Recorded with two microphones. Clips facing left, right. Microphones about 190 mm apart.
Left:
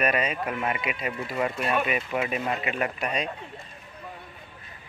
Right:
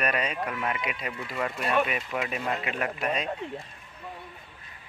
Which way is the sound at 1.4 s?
5° left (ahead or behind).